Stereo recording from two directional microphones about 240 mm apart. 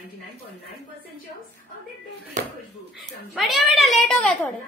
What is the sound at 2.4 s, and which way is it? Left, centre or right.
Speech, right.